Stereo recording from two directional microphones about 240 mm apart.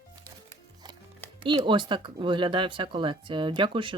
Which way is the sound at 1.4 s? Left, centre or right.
Centre.